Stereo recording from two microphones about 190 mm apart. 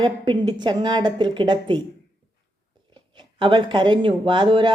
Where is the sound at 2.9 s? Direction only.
25° right (ahead or behind).